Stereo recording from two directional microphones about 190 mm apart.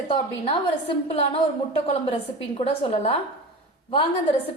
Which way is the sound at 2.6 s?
30° left (ahead or behind).